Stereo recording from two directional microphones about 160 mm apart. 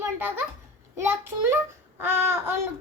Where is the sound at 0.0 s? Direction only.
15° right (ahead or behind).